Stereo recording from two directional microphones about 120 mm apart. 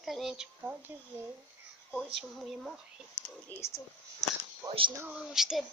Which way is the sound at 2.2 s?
Centre (ahead or behind).